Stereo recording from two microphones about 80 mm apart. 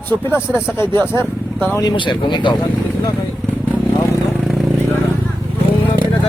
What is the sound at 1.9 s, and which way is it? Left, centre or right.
Speech, left.